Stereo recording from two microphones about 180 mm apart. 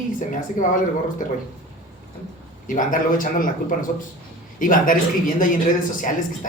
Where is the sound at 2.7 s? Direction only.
45° left (ahead or behind).